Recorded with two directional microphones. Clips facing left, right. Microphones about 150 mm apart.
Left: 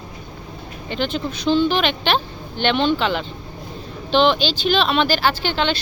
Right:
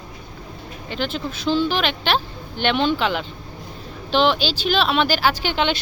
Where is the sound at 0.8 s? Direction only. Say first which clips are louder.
Left 3 dB; 5° right (ahead or behind).